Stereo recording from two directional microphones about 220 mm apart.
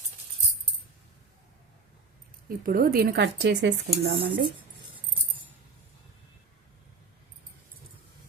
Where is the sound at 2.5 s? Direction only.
40° right (ahead or behind).